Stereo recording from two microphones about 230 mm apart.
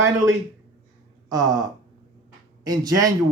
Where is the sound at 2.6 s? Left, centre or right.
Centre.